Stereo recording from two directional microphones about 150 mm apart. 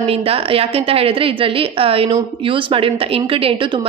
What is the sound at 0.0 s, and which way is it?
A woman's voice, 40° right (ahead or behind).